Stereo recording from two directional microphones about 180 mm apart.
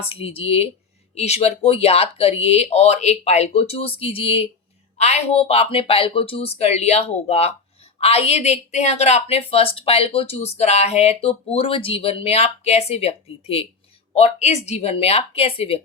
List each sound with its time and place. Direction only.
0.0 s a woman's voice: 30° left (ahead or behind)